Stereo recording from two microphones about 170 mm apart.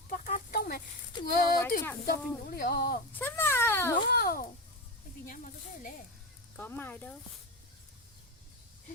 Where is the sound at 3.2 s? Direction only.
15° left (ahead or behind).